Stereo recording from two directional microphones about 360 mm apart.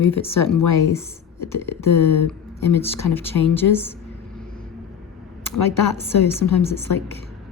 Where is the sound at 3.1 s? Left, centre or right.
Centre.